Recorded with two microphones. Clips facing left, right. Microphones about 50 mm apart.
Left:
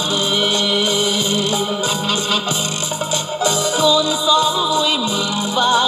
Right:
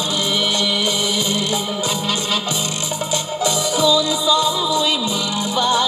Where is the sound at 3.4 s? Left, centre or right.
Left.